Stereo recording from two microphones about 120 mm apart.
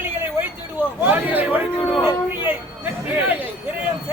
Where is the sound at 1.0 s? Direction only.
15° right (ahead or behind).